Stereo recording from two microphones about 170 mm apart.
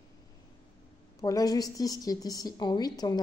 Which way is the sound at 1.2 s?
20° left (ahead or behind).